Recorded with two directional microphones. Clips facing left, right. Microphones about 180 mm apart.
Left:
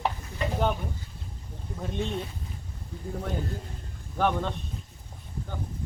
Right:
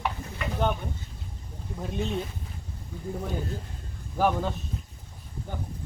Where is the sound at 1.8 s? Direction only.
Centre (ahead or behind).